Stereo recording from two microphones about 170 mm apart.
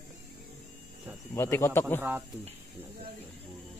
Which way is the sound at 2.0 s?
10° right (ahead or behind).